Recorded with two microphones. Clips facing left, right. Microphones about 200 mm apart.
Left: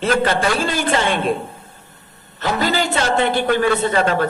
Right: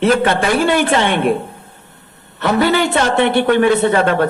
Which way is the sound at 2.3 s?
60° right (ahead or behind).